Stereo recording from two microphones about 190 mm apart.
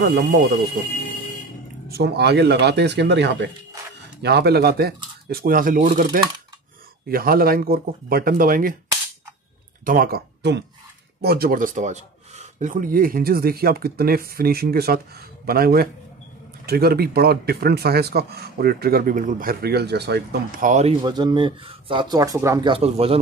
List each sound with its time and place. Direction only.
1.9 s speech: 60° right (ahead or behind)
9.8 s speech: 50° right (ahead or behind)
20.6 s speech: 40° right (ahead or behind)
21.0 s speech: 20° right (ahead or behind)
22.7 s speech: 30° right (ahead or behind)